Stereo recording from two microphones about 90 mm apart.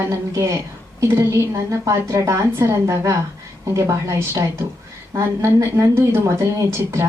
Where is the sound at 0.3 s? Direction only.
40° right (ahead or behind).